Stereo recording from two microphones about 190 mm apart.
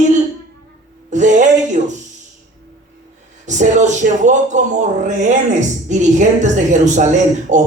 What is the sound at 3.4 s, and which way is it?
Speech, 40° right (ahead or behind).